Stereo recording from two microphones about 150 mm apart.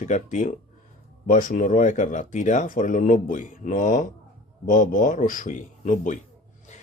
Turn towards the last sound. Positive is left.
turn(degrees=55)  # may be behind; listen again after turning